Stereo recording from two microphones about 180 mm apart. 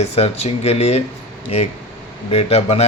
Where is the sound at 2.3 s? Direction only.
35° left (ahead or behind).